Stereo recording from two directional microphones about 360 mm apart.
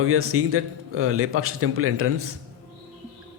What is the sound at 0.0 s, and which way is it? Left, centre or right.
A man's voice, right.